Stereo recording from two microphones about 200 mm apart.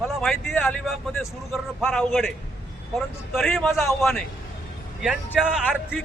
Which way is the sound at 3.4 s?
Centre (ahead or behind).